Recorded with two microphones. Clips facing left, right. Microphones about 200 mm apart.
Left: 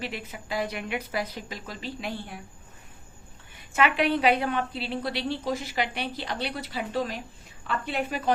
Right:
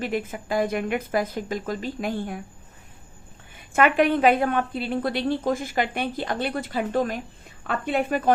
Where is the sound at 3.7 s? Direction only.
50° right (ahead or behind).